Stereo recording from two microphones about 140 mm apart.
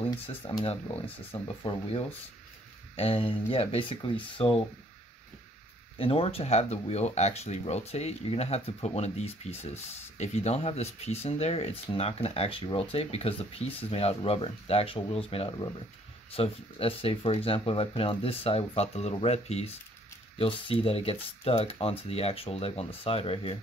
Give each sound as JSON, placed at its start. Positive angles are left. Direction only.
{"t": 0.1, "sound": "speech", "side_deg": 35}
{"t": 5.9, "sound": "speech", "side_deg": 40}